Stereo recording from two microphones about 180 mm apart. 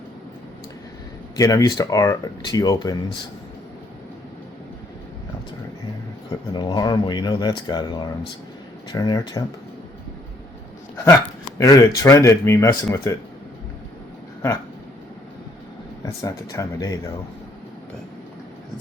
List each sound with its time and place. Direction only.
1.4 s speech: 20° left (ahead or behind)
6.3 s speech: 20° left (ahead or behind)
11.1 s speech: 20° left (ahead or behind)
16.0 s speech: 15° left (ahead or behind)